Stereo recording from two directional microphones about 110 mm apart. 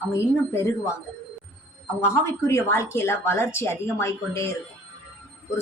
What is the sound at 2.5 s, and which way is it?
Speech, 25° left (ahead or behind).